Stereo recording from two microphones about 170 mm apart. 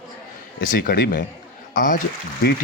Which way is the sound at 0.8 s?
65° left (ahead or behind).